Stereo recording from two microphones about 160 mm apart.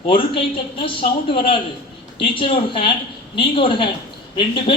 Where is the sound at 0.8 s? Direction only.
30° left (ahead or behind).